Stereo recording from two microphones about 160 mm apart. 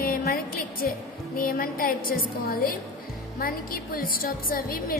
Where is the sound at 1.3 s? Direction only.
65° left (ahead or behind).